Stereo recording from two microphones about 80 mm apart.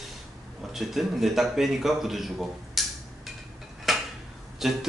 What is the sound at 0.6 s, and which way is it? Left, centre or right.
Speech, centre.